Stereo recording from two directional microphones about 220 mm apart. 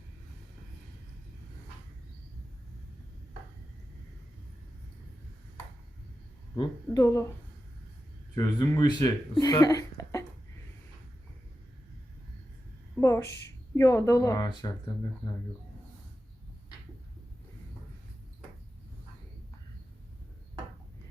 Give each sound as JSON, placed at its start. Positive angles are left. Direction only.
{"t": 6.6, "sound": "speech", "side_deg": 15}
{"t": 8.4, "sound": "speech", "side_deg": 15}
{"t": 13.0, "sound": "a woman's voice", "side_deg": 15}